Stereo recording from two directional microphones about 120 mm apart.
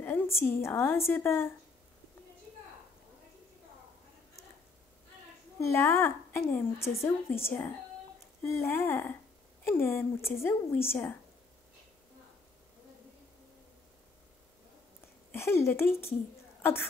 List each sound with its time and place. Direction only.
0.0 s a sound: 15° left (ahead or behind)
0.7 s a woman's voice: 20° left (ahead or behind)
5.6 s a woman's voice: 20° left (ahead or behind)
15.3 s a woman's voice: 20° left (ahead or behind)